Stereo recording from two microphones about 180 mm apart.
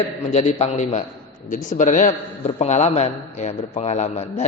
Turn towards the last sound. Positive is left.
turn(degrees=40)  # may be behind; listen again after turning